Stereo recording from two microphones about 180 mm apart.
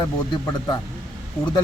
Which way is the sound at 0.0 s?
20° left (ahead or behind).